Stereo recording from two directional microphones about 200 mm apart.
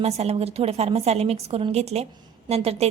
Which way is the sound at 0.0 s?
30° right (ahead or behind).